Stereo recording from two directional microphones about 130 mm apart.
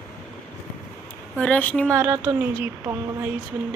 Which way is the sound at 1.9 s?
20° right (ahead or behind).